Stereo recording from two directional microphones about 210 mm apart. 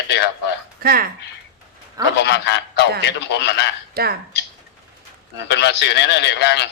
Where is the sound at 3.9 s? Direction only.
45° right (ahead or behind).